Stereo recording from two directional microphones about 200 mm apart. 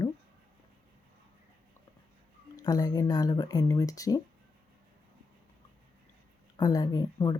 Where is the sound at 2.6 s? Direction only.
20° left (ahead or behind).